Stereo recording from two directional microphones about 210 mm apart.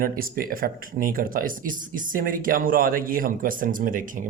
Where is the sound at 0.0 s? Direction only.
45° right (ahead or behind).